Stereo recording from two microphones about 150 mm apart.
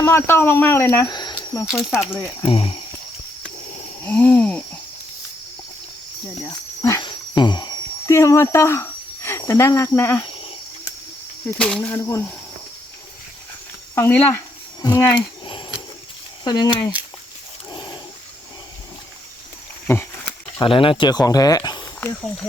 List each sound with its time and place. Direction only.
0.0 s speech: 15° left (ahead or behind)
1.0 s a sound: 30° left (ahead or behind)
2.4 s speech: 40° left (ahead or behind)
4.0 s speech: 10° left (ahead or behind)
6.5 s a sound: 25° left (ahead or behind)
11.5 s speech: 5° left (ahead or behind)
13.9 s speech: 15° left (ahead or behind)
15.4 s a sound: 35° left (ahead or behind)
16.4 s speech: 30° left (ahead or behind)
17.7 s dog: 30° left (ahead or behind)
19.9 s a sound: 15° left (ahead or behind)
20.6 s speech: 35° left (ahead or behind)